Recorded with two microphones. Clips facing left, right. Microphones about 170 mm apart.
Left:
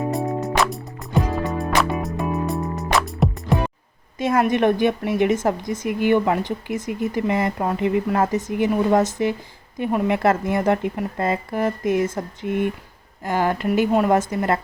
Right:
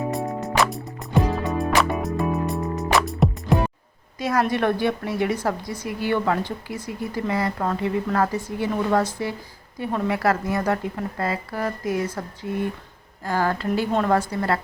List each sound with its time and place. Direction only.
0.1 s music: centre (ahead or behind)
4.2 s a woman's voice: 25° left (ahead or behind)